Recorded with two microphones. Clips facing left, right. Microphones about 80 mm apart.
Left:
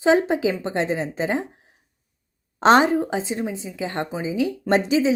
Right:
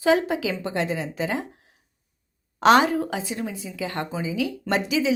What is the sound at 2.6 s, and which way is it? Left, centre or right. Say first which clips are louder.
A woman's voice: left 2 dB; left.